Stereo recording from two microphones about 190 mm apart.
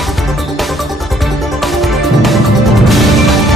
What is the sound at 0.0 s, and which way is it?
Music, centre (ahead or behind).